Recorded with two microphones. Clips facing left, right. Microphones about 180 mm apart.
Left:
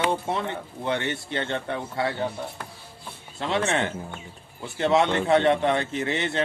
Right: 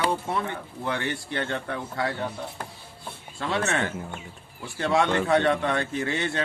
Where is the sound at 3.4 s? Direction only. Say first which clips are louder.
Left 2 dB; 20° left (ahead or behind).